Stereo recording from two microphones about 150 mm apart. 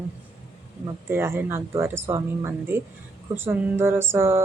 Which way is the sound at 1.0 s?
15° right (ahead or behind).